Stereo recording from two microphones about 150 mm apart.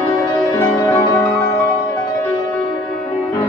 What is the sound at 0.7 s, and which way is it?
Music, 5° left (ahead or behind).